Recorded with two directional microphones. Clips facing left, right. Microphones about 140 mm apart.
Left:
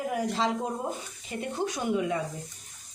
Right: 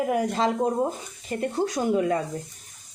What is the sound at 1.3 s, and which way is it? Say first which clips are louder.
Speech: right 5 dB; 40° right (ahead or behind).